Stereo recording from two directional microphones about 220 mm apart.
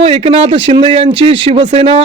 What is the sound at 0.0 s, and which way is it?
Speech, 25° right (ahead or behind).